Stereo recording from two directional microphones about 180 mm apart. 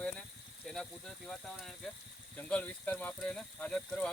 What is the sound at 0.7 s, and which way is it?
Speech, centre (ahead or behind).